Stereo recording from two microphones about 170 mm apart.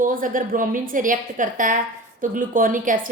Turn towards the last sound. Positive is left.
turn(degrees=-50)  # may be behind; listen again after turning